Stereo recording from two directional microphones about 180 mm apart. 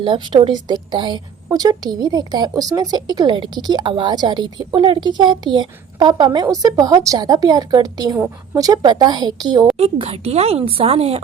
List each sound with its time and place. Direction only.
0.0 s a woman's voice: 25° right (ahead or behind)
9.7 s a woman's voice: 35° right (ahead or behind)